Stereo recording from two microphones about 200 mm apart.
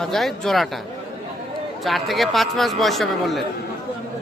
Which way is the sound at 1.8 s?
Centre (ahead or behind).